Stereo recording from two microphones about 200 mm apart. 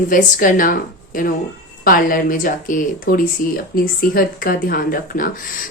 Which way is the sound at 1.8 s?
45° left (ahead or behind).